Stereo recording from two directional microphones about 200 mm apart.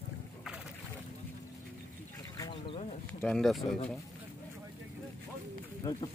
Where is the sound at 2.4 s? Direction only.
25° left (ahead or behind).